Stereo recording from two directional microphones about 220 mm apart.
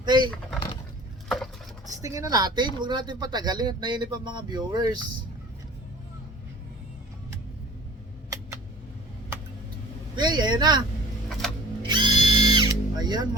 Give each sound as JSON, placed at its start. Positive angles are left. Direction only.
{"t": 0.0, "sound": "speech", "side_deg": -20}
{"t": 2.0, "sound": "speech", "side_deg": -15}
{"t": 10.2, "sound": "speech", "side_deg": -20}
{"t": 11.8, "sound": "drill", "side_deg": -20}